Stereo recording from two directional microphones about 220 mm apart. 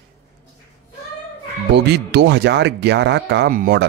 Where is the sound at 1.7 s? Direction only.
50° right (ahead or behind).